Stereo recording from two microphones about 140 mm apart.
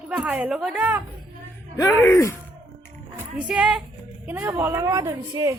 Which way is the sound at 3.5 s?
5° right (ahead or behind).